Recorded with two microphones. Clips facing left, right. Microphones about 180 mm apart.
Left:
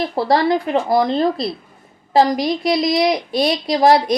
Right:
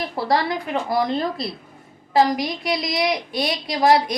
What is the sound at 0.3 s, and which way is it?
A woman's voice, 30° left (ahead or behind).